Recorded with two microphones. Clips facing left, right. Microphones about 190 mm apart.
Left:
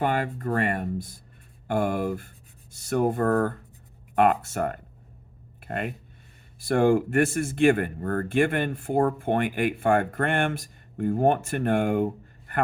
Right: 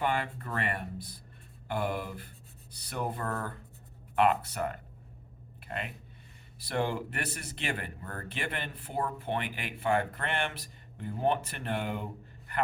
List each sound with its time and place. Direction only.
0.0 s speech: 45° left (ahead or behind)